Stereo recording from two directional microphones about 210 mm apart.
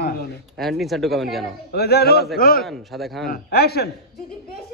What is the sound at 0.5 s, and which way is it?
Speech, centre (ahead or behind).